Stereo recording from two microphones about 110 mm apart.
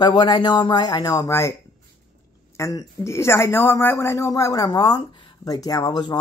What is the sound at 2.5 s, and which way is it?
Speech, 25° left (ahead or behind).